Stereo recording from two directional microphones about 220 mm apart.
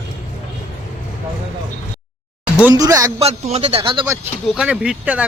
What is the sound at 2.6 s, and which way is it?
Speech, 15° right (ahead or behind).